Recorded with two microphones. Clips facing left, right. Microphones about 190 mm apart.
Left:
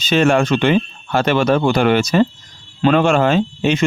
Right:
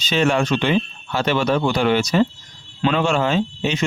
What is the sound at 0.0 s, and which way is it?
Speech, 50° left (ahead or behind).